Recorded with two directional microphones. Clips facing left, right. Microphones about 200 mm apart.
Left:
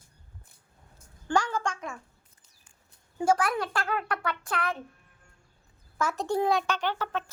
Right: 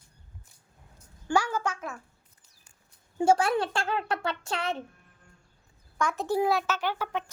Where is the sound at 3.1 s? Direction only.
25° right (ahead or behind).